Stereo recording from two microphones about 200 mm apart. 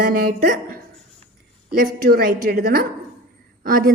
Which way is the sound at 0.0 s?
50° right (ahead or behind).